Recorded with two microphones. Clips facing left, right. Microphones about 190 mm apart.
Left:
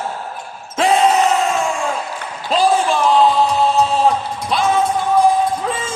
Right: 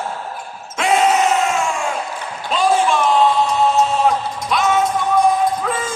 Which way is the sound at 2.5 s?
35° left (ahead or behind).